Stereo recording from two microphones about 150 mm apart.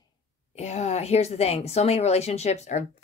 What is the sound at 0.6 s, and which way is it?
Speech, 45° left (ahead or behind).